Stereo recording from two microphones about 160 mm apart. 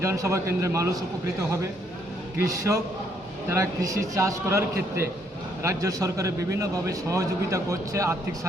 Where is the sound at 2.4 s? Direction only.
20° right (ahead or behind).